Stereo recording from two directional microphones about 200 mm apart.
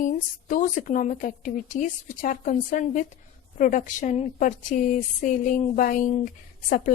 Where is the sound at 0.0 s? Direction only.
40° left (ahead or behind).